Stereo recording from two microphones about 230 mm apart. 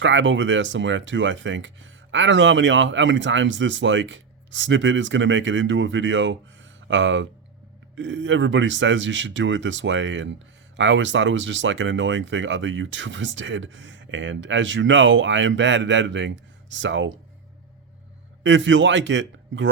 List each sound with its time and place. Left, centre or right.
0.0 s speech: right
18.4 s speech: right